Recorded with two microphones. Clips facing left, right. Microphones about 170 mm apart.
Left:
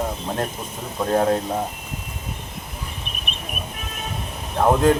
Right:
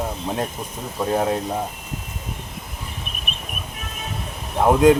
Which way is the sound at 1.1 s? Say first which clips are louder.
Left 2 dB; 5° right (ahead or behind).